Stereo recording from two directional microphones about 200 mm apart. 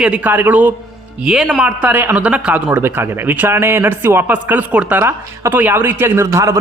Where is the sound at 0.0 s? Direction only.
5° right (ahead or behind).